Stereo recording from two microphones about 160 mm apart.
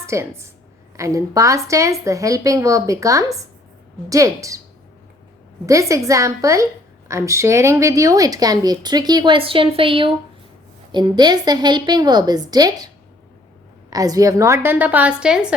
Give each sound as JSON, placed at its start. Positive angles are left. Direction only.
{"t": 0.0, "sound": "a woman's voice", "side_deg": -15}
{"t": 5.6, "sound": "speech", "side_deg": -20}
{"t": 13.9, "sound": "a woman's voice", "side_deg": -20}